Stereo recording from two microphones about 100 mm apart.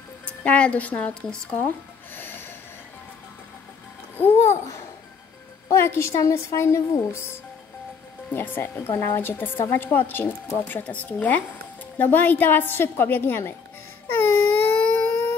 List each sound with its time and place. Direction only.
0.2 s speech: 15° left (ahead or behind)
2.1 s train: 20° left (ahead or behind)
4.2 s speech: 25° left (ahead or behind)
14.0 s a sound: 20° left (ahead or behind)